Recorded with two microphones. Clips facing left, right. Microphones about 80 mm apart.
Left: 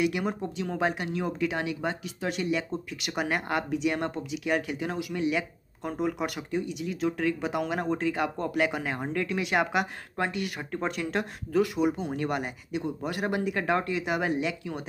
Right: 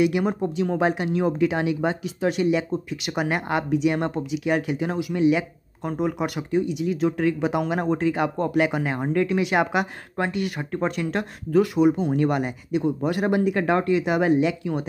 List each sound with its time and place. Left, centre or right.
0.0 s speech: centre